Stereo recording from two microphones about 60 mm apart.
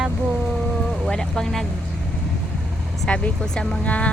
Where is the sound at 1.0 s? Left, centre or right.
Centre.